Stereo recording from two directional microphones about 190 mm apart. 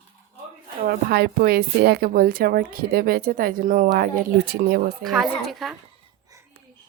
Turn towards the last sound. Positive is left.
turn(degrees=0)  # may be behind; listen again after turning